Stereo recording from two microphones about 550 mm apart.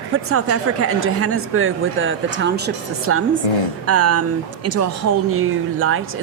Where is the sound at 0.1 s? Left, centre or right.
Right.